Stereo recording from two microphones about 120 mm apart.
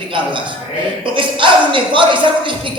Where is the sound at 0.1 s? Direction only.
45° right (ahead or behind).